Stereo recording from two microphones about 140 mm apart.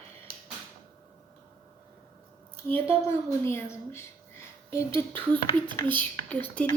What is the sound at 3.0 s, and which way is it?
A woman's voice, 20° left (ahead or behind).